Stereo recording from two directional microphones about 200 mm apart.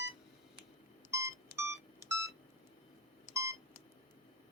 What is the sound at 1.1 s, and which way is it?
Beep, 15° right (ahead or behind).